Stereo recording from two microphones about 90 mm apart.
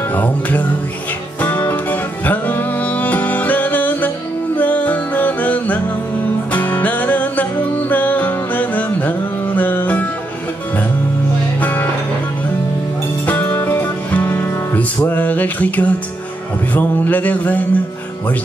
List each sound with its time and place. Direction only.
0.1 s music: 20° left (ahead or behind)
11.6 s music: 20° left (ahead or behind)
13.3 s music: 20° left (ahead or behind)
15.0 s a sound: 20° left (ahead or behind)
16.7 s music: 20° left (ahead or behind)